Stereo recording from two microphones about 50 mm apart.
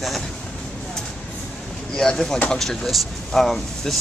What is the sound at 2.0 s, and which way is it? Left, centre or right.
Speech, centre.